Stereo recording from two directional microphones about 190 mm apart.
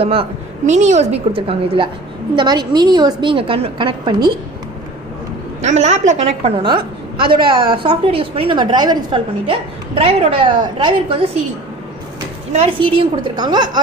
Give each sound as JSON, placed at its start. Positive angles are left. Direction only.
{"t": 0.0, "sound": "a woman's voice", "side_deg": -30}
{"t": 5.6, "sound": "a woman's voice", "side_deg": -40}
{"t": 12.5, "sound": "a woman's voice", "side_deg": -30}